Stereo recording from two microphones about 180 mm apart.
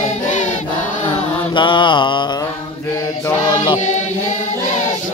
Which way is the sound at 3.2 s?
20° left (ahead or behind).